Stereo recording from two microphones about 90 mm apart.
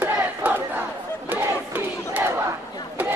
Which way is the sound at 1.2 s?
25° right (ahead or behind).